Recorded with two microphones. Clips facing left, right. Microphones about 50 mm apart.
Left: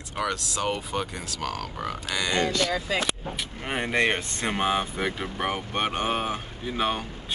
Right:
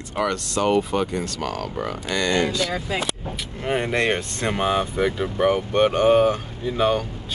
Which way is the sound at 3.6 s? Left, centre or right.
Centre.